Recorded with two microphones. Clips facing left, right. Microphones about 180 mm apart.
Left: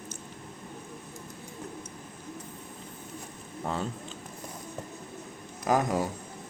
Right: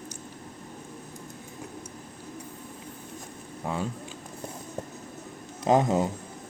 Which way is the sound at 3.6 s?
5° right (ahead or behind).